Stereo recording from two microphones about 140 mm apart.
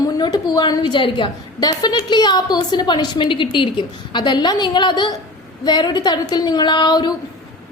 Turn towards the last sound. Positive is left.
turn(degrees=30)  # may be behind; listen again after turning